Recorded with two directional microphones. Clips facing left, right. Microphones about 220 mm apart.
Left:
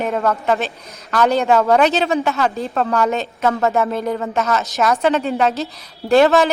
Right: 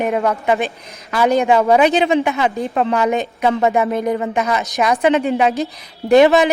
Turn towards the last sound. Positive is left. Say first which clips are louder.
# right 2 dB
turn(degrees=-15)  # may be behind; listen again after turning